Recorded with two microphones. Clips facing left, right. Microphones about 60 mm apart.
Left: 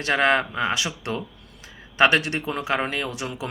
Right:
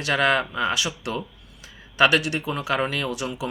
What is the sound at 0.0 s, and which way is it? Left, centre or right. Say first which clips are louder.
Speech: left 1 dB; left.